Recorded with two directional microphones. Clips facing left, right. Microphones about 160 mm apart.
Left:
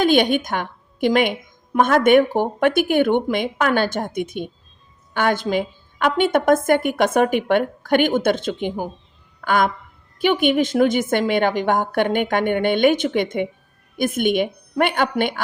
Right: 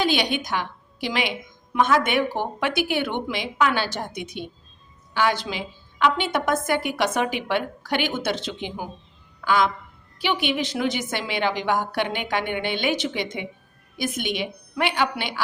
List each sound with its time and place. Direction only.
0.0 s a woman's voice: 50° left (ahead or behind)
9.4 s a sound: 50° left (ahead or behind)
10.2 s a woman's voice: 50° left (ahead or behind)